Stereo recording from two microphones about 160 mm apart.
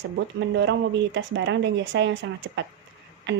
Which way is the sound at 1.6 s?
90° right.